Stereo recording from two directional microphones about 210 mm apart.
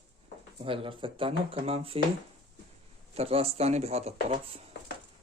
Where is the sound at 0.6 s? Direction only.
25° right (ahead or behind).